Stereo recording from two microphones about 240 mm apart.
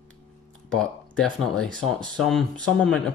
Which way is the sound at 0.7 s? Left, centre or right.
Centre.